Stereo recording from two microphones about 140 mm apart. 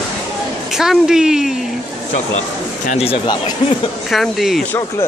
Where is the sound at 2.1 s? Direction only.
55° left (ahead or behind).